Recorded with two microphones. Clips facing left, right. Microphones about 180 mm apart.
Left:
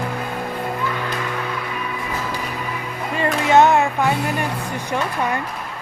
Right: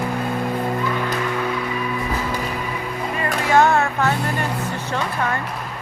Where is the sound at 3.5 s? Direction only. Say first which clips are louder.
Left 2 dB; 20° left (ahead or behind).